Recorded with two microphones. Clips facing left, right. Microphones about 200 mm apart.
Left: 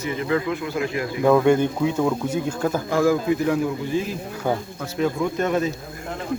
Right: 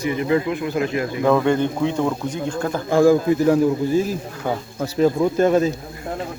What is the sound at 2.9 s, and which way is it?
Speech, 30° right (ahead or behind).